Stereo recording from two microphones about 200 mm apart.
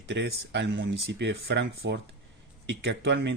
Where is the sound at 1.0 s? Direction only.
55° right (ahead or behind).